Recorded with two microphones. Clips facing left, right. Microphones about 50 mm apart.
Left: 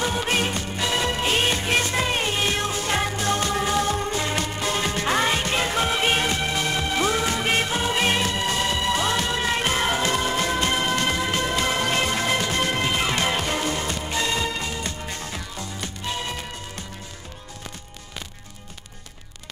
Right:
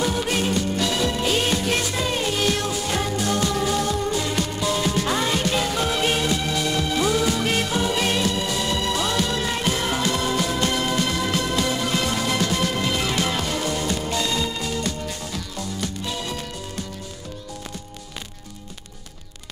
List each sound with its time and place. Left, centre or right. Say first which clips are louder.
0.0 s music: right 1 dB; left
12.1 s music: even; left